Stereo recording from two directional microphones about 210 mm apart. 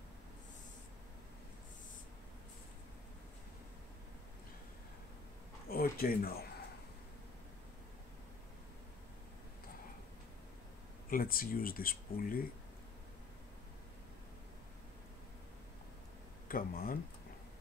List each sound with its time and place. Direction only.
5.7 s a sound: 45° left (ahead or behind)
11.1 s speech: 45° left (ahead or behind)
16.4 s speech: 45° left (ahead or behind)